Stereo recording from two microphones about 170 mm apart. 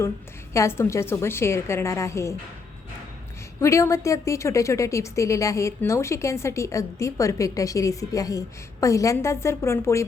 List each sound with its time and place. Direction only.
0.5 s a woman's voice: 15° left (ahead or behind)
3.6 s a woman's voice: 15° left (ahead or behind)